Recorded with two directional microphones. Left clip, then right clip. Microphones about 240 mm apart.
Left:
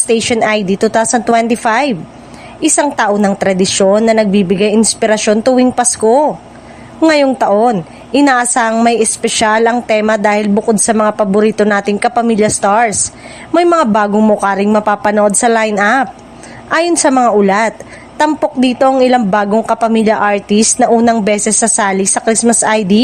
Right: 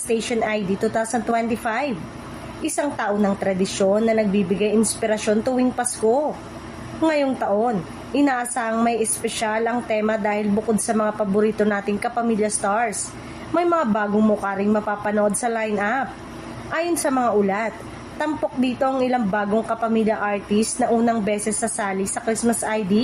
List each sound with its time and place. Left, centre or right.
0.1 s a woman's voice: left